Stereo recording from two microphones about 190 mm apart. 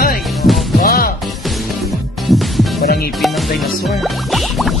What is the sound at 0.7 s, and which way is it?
Music, 50° left (ahead or behind).